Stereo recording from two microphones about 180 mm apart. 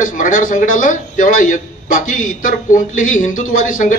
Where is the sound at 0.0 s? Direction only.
50° left (ahead or behind).